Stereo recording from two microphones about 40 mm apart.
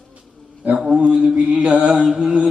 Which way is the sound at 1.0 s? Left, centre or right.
Right.